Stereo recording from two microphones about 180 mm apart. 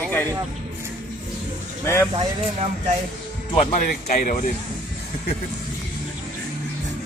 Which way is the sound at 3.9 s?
55° left (ahead or behind).